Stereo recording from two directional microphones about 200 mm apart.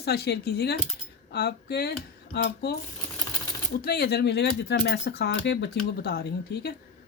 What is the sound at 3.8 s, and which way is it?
Speech, 50° left (ahead or behind).